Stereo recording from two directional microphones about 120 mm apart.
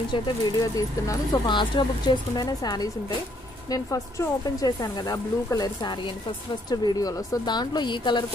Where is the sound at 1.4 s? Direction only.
40° left (ahead or behind).